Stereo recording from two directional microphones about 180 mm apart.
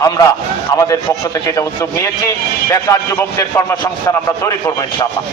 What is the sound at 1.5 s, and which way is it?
Speech, 15° left (ahead or behind).